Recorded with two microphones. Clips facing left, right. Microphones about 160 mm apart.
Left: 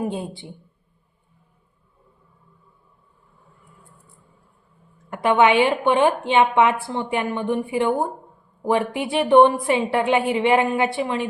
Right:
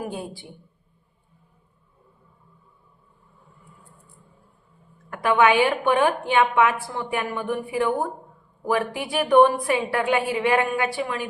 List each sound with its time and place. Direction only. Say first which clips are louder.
0.0 s a woman's voice: left 5 dB; 25° left (ahead or behind)
5.1 s a woman's voice: left 2 dB; 25° left (ahead or behind)